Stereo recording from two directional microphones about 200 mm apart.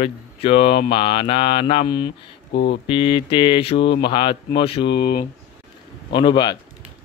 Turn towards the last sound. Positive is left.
turn(degrees=25)  # may be behind; listen again after turning